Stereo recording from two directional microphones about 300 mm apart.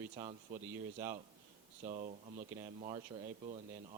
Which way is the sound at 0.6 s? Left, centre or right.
Centre.